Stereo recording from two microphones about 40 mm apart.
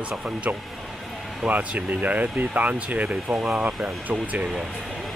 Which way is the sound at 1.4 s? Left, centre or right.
Right.